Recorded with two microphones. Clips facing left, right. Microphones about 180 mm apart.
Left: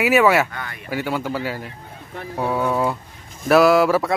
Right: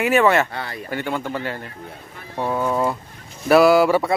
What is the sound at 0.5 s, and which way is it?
Speech, 30° right (ahead or behind).